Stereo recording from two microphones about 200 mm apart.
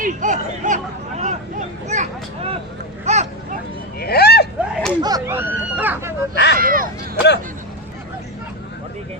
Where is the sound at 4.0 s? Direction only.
50° left (ahead or behind).